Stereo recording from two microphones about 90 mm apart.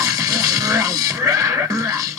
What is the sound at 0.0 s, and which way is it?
Music, 40° right (ahead or behind).